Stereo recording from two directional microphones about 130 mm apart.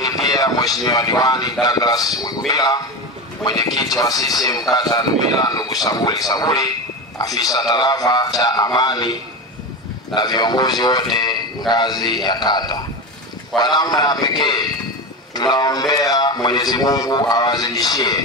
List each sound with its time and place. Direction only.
0.0 s a man's voice: 30° left (ahead or behind)